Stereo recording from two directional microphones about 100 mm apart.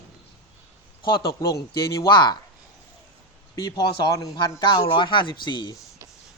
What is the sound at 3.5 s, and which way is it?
Speech, 40° left (ahead or behind).